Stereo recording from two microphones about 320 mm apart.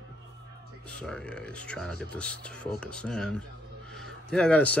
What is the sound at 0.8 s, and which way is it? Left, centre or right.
Speech, centre.